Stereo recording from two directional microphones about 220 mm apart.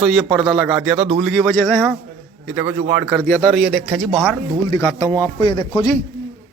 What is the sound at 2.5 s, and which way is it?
A man's voice, 10° right (ahead or behind).